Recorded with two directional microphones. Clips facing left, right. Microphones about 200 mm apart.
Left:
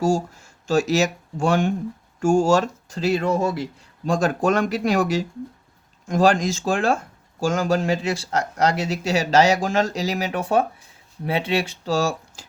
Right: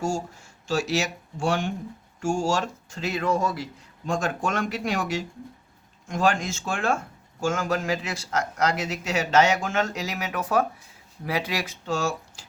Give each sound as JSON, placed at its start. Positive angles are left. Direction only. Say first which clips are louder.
{"t": 0.7, "sound": "speech", "louder": "left 6 dB", "side_deg": 40}